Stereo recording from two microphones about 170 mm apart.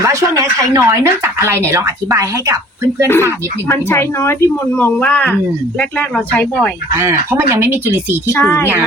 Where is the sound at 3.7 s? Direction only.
15° left (ahead or behind).